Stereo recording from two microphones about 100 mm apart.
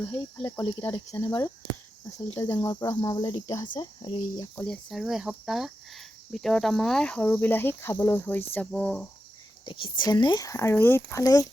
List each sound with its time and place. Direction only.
0.0 s speech: 25° left (ahead or behind)
2.9 s speech: 40° left (ahead or behind)
3.8 s speech: 45° left (ahead or behind)
4.6 s speech: 5° left (ahead or behind)
7.2 s speech: 25° left (ahead or behind)
9.6 s speech: 55° left (ahead or behind); by 11.0 s 20° left (ahead or behind)
11.1 s speech: 40° left (ahead or behind)